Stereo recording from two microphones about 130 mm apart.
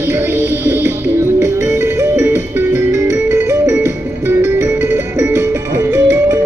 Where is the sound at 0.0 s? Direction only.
15° right (ahead or behind).